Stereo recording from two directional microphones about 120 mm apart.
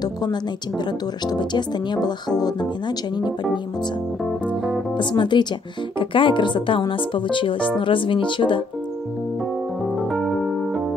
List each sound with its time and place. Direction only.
0.0 s speech: 35° left (ahead or behind)
4.2 s music: centre (ahead or behind)
4.9 s speech: 40° left (ahead or behind)
9.9 s keyboard: centre (ahead or behind)